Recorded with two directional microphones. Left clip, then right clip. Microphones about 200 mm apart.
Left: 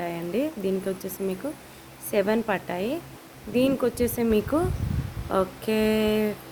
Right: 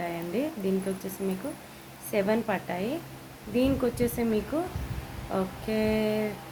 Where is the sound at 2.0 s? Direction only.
55° left (ahead or behind).